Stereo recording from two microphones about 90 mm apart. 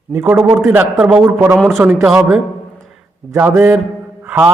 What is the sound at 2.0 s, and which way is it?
Speech, 10° right (ahead or behind).